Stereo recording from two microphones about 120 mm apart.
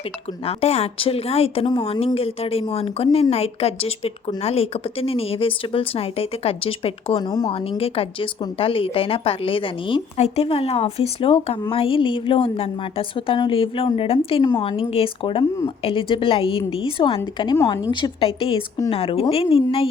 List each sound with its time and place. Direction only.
0.4 s speech: 60° left (ahead or behind)
1.6 s a woman's voice: 40° left (ahead or behind)
2.1 s speech: 55° left (ahead or behind)
7.2 s a woman's voice: 35° left (ahead or behind)
7.5 s speech: 50° left (ahead or behind)
10.2 s a woman's voice: 65° left (ahead or behind)